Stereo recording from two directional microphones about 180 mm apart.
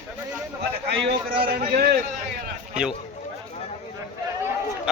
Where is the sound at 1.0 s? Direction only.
55° right (ahead or behind).